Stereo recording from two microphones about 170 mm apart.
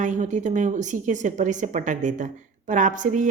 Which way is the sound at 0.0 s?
45° right (ahead or behind).